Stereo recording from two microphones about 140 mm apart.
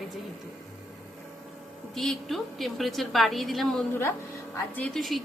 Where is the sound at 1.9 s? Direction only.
Centre (ahead or behind).